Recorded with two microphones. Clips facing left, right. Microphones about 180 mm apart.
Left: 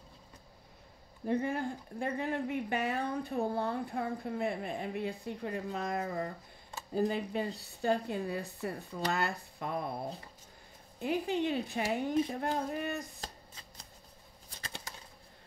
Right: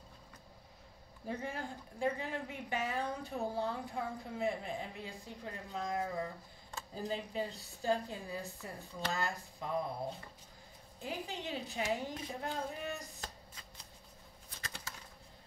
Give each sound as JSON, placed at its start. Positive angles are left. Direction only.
{"t": 1.2, "sound": "speech", "side_deg": 55}
{"t": 11.0, "sound": "speech", "side_deg": 60}
{"t": 13.2, "sound": "shuffling cards", "side_deg": 35}
{"t": 14.6, "sound": "a sound", "side_deg": 35}